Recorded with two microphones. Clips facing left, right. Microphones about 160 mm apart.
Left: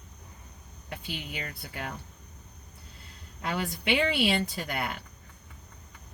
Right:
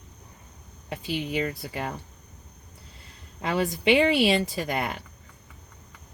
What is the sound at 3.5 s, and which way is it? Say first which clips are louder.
Speech: right 7 dB; 90° right.